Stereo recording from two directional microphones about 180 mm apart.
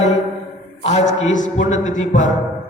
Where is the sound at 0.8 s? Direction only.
40° left (ahead or behind).